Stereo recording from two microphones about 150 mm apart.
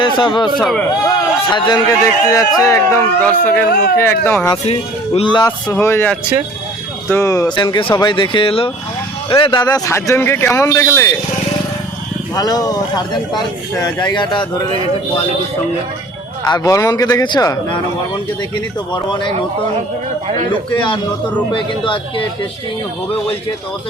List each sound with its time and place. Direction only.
0.0 s speech: 30° left (ahead or behind)
0.5 s speech: centre (ahead or behind)
1.2 s speech: 30° left (ahead or behind); by 4.5 s 10° left (ahead or behind)
4.6 s speech: 45° left (ahead or behind)
5.7 s speech: 15° left (ahead or behind)
7.1 s speech: 20° left (ahead or behind)
9.6 s speech: 20° left (ahead or behind)
12.3 s speech: 25° left (ahead or behind)
16.4 s speech: 25° left (ahead or behind)
21.5 s speech: 35° left (ahead or behind)